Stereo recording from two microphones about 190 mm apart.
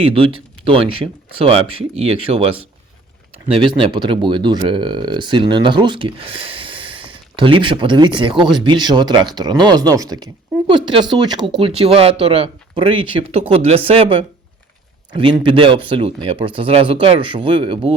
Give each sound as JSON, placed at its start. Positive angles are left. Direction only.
{"t": 0.0, "sound": "speech", "side_deg": -30}
{"t": 15.2, "sound": "speech", "side_deg": -25}